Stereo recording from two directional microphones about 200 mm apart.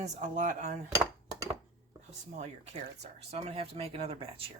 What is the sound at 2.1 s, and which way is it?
Speech, 35° right (ahead or behind).